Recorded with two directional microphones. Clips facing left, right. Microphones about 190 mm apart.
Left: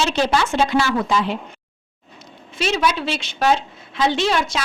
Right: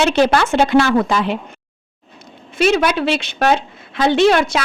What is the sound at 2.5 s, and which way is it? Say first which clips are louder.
A woman's voice: right 6 dB; 55° right (ahead or behind).